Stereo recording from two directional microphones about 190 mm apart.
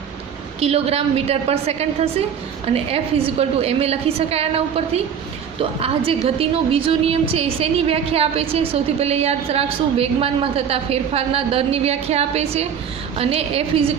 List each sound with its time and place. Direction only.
0.6 s a woman's voice: 30° right (ahead or behind)
5.8 s a woman's voice: 30° right (ahead or behind)